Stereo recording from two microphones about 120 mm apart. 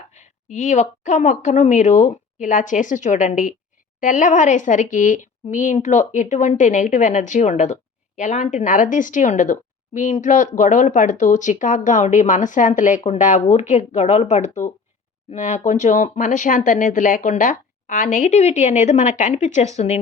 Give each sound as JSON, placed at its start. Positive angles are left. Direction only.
{"t": 0.1, "sound": "speech", "side_deg": 85}
{"t": 15.3, "sound": "speech", "side_deg": 90}